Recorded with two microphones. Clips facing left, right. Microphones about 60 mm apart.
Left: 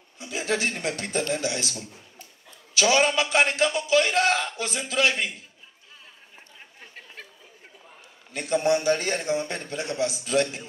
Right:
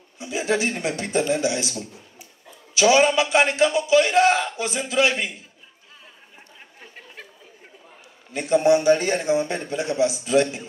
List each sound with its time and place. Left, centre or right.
0.2 s a man's voice: right
6.8 s chatter: centre
8.3 s a man's voice: right